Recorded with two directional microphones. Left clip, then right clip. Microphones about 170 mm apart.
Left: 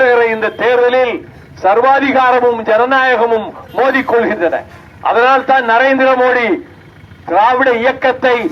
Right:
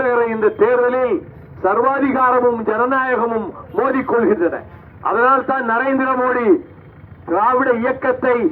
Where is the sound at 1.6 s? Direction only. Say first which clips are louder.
Left 6 dB; 25° left (ahead or behind).